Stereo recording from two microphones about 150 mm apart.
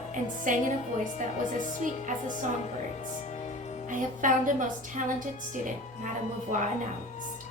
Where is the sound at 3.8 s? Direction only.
60° right (ahead or behind).